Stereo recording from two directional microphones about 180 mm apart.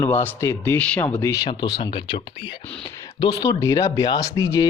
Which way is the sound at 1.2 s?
20° left (ahead or behind).